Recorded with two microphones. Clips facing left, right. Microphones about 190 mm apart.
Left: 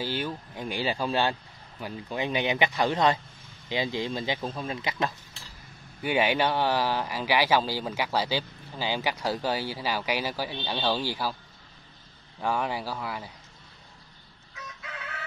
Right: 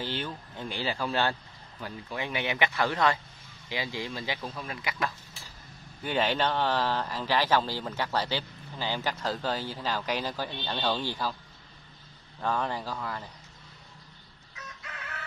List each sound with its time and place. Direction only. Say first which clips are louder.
0.0 s speech: left 3 dB; 10° left (ahead or behind)
6.0 s speech: left 3 dB; 10° left (ahead or behind)
12.4 s speech: left 2 dB; 10° left (ahead or behind)